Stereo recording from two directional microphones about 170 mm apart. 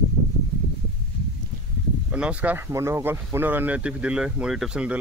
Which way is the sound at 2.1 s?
10° right (ahead or behind).